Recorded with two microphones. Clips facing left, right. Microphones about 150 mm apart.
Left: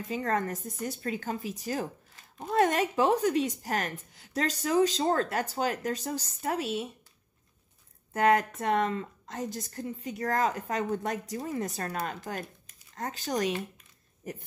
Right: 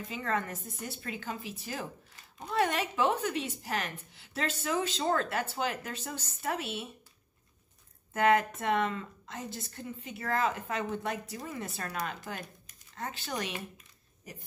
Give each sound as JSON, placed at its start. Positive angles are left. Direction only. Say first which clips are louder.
{"t": 0.1, "sound": "speech", "louder": "left 4 dB", "side_deg": 40}
{"t": 8.1, "sound": "speech", "louder": "left 2 dB", "side_deg": 35}